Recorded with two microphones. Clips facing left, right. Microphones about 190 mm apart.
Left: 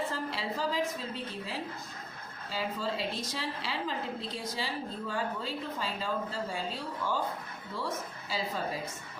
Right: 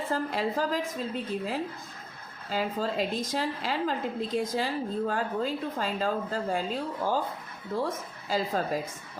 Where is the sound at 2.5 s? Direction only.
45° right (ahead or behind).